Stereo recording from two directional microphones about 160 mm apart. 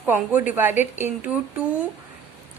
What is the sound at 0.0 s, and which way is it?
A woman's voice, 10° right (ahead or behind).